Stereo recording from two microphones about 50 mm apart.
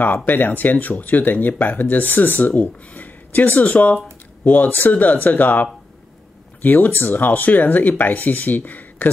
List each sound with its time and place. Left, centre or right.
0.0 s speech: left